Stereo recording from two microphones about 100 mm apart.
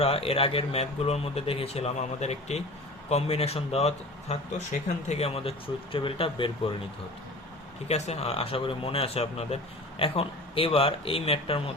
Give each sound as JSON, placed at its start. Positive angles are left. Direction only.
{"t": 0.0, "sound": "speech", "side_deg": 70}
{"t": 7.9, "sound": "speech", "side_deg": 90}
{"t": 10.0, "sound": "speech", "side_deg": 65}